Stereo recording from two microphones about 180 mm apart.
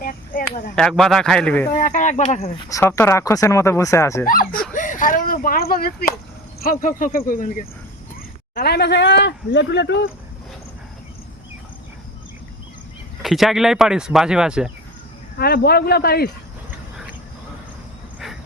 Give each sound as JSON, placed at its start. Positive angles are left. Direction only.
{"t": 0.0, "sound": "a sound", "side_deg": 50}
{"t": 0.8, "sound": "speech", "side_deg": 5}
{"t": 1.7, "sound": "speech", "side_deg": 50}
{"t": 2.6, "sound": "speech", "side_deg": 15}
{"t": 4.7, "sound": "speech", "side_deg": 45}
{"t": 8.5, "sound": "speech", "side_deg": 65}
{"t": 13.2, "sound": "speech", "side_deg": 0}
{"t": 15.4, "sound": "a man's voice", "side_deg": 60}